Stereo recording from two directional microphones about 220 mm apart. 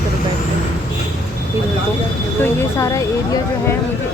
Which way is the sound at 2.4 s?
15° left (ahead or behind).